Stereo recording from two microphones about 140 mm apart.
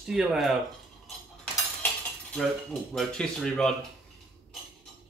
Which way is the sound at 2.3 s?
Centre (ahead or behind).